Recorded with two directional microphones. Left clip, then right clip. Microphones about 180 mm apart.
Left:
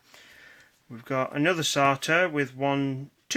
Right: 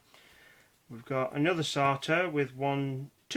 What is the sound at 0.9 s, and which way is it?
Speech, 45° left (ahead or behind).